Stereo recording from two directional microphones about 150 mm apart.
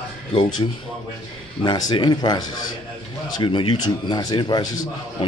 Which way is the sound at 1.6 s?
30° left (ahead or behind).